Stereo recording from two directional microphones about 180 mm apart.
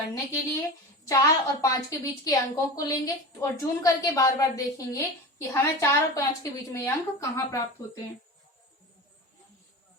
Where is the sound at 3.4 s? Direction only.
15° left (ahead or behind).